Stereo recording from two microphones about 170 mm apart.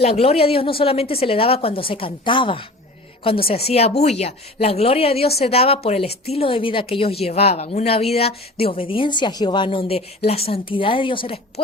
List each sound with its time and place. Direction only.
0.0 s a woman's voice: 35° left (ahead or behind)